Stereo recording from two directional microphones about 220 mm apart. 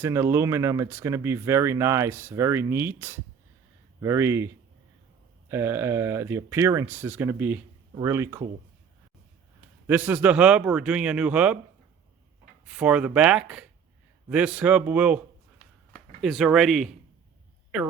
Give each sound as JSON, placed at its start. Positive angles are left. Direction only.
{"t": 0.0, "sound": "speech", "side_deg": -10}
{"t": 9.8, "sound": "a man's voice", "side_deg": -10}
{"t": 12.6, "sound": "a man's voice", "side_deg": -5}